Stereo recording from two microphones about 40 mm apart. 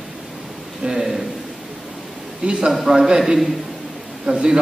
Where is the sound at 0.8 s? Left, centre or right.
Centre.